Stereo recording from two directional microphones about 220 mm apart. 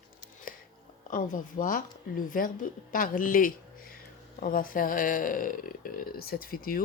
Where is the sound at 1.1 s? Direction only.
35° left (ahead or behind).